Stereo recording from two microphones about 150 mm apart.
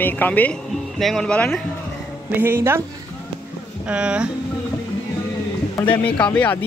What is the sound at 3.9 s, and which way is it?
Speech, 5° right (ahead or behind).